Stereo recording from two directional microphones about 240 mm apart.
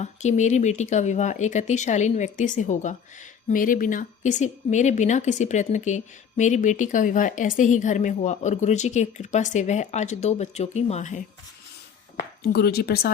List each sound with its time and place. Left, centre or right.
0.0 s a woman's voice: left
12.4 s speech: left